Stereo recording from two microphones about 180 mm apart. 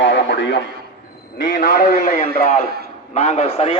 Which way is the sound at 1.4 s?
55° left (ahead or behind).